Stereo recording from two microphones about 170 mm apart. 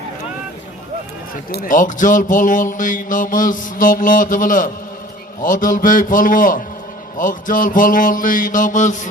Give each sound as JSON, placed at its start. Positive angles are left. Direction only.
{"t": 1.5, "sound": "speech", "side_deg": 60}